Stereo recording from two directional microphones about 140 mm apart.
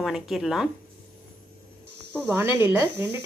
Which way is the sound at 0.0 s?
Centre (ahead or behind).